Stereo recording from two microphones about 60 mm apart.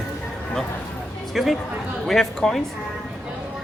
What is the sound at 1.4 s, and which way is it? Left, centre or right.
Speech, centre.